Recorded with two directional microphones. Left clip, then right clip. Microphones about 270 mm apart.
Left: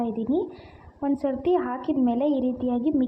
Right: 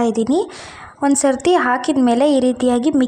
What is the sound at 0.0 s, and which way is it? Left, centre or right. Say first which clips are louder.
A woman's voice: right 10 dB; right.